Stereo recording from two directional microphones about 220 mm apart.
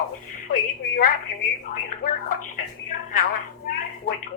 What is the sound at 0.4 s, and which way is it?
A woman's voice, 40° left (ahead or behind).